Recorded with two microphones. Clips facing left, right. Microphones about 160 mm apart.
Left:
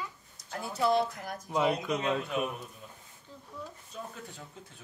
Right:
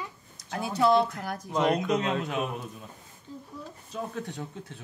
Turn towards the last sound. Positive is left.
turn(degrees=-80)